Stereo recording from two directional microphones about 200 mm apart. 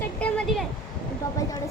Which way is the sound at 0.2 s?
5° left (ahead or behind).